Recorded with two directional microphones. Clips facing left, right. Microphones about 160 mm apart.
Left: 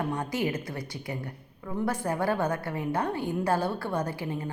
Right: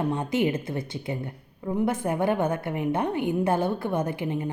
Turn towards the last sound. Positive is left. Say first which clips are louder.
# right 4 dB
turn(degrees=-20)  # may be behind; listen again after turning